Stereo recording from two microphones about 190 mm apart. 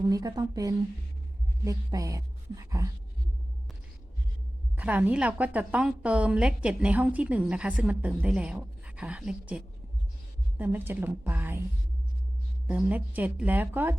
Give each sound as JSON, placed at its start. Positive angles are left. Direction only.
{"t": 0.1, "sound": "a woman's voice", "side_deg": -20}
{"t": 4.8, "sound": "a woman's voice", "side_deg": -10}
{"t": 12.6, "sound": "a woman's voice", "side_deg": -10}